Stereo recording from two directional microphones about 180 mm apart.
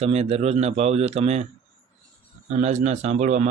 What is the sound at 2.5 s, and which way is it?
Speech, 40° right (ahead or behind).